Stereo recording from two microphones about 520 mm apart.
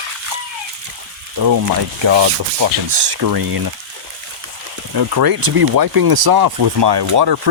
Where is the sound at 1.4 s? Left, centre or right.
Right.